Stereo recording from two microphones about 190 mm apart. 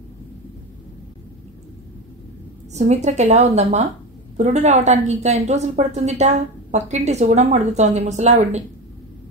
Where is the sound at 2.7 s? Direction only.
35° right (ahead or behind).